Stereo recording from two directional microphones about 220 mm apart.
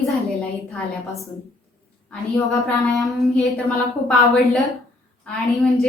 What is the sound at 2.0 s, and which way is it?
Speech, centre (ahead or behind).